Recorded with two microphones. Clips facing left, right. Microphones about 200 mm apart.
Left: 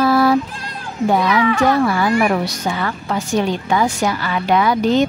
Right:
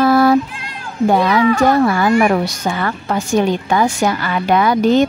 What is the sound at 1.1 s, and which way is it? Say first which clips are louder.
Speech: right 3 dB; 35° right (ahead or behind).